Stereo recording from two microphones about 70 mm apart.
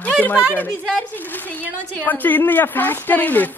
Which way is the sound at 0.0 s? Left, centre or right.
Left.